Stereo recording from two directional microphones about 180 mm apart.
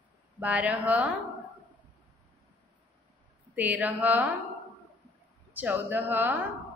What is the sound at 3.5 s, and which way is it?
Speech, 10° right (ahead or behind).